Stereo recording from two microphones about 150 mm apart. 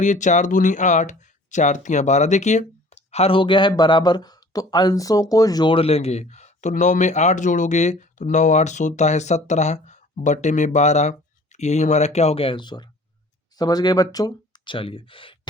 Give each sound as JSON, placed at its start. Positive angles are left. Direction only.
{"t": 0.0, "sound": "speech", "side_deg": 55}